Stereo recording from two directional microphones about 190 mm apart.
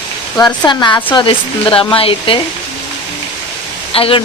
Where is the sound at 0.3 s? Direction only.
20° left (ahead or behind).